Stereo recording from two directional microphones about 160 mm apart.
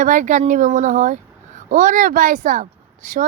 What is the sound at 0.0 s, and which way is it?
A woman's voice, 50° right (ahead or behind).